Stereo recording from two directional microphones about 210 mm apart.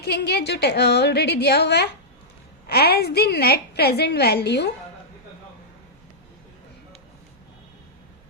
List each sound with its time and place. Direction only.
0.0 s a woman's voice: 50° left (ahead or behind)